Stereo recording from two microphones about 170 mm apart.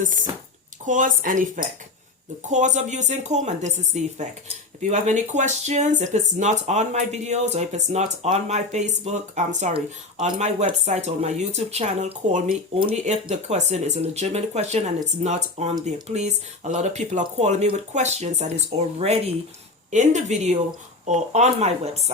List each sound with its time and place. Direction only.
0.0 s speech: 50° right (ahead or behind)